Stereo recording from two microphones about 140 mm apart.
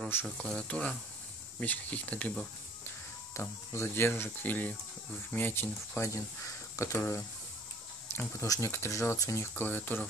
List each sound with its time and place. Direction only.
0.1 s speech: 10° left (ahead or behind)